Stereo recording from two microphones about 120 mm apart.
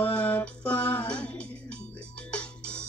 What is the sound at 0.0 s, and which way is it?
Music, 10° left (ahead or behind).